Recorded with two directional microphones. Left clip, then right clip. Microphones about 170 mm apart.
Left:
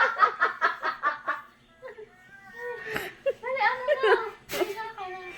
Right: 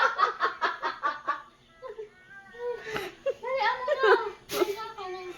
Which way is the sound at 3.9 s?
5° right (ahead or behind).